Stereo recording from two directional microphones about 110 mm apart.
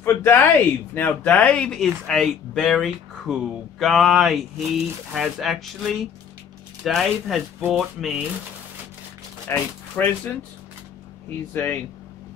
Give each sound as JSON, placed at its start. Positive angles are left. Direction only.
{"t": 0.0, "sound": "a sound", "side_deg": 20}
{"t": 0.9, "sound": "speech", "side_deg": 15}
{"t": 9.5, "sound": "speech", "side_deg": 15}
{"t": 11.5, "sound": "speech", "side_deg": 20}